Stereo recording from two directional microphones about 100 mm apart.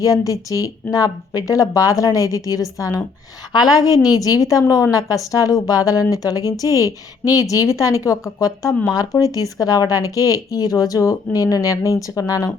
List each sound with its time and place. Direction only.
0.0 s speech: 35° left (ahead or behind)